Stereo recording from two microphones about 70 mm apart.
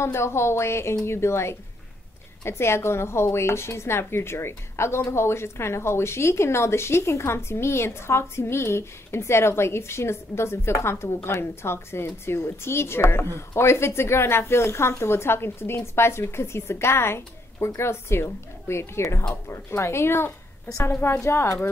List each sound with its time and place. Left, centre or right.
0.0 s a woman's voice: left